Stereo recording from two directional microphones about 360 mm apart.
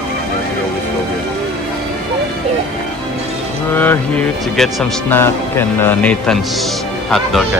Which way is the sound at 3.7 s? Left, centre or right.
Centre.